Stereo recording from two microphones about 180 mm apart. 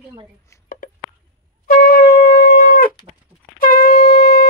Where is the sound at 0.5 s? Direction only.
15° left (ahead or behind).